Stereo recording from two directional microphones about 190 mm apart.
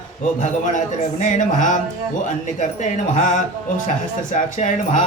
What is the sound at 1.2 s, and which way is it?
Speech, 40° left (ahead or behind).